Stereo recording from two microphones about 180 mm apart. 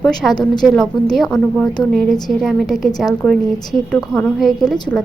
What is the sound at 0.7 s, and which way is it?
A woman's voice, centre (ahead or behind).